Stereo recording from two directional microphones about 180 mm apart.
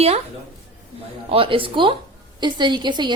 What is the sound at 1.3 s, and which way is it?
A woman's voice, 30° right (ahead or behind).